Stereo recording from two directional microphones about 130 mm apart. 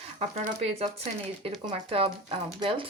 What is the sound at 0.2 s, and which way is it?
Speech, 50° right (ahead or behind).